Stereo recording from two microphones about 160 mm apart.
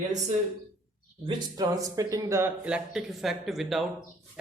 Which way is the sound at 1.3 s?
25° right (ahead or behind).